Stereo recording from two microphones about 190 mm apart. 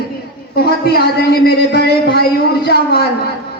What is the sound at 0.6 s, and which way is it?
Speech, 55° left (ahead or behind).